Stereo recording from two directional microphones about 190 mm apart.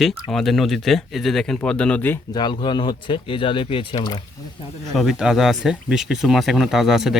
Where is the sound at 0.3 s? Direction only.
Centre (ahead or behind).